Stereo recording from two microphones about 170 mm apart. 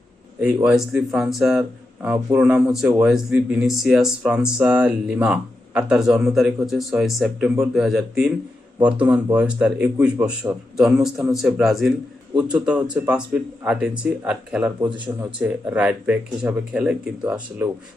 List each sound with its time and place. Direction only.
0.3 s speech: 10° right (ahead or behind)